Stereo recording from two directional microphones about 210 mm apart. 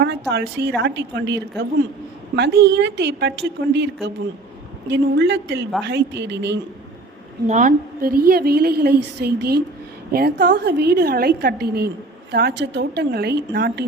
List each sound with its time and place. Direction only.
0.0 s a woman's voice: 55° right (ahead or behind)
4.9 s a woman's voice: 55° right (ahead or behind)
7.4 s a woman's voice: 35° right (ahead or behind); by 13.8 s 50° right (ahead or behind)